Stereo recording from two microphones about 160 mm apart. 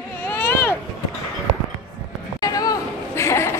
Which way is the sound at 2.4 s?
20° left (ahead or behind).